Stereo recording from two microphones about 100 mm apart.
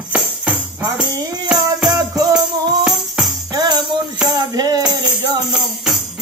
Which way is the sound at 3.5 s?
45° right (ahead or behind).